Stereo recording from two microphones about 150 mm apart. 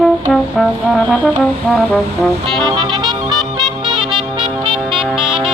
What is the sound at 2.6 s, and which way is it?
Music, 25° right (ahead or behind).